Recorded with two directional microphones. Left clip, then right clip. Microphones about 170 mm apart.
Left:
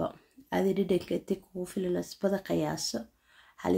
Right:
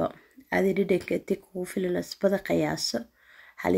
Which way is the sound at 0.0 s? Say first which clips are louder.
Right 5 dB; 20° right (ahead or behind).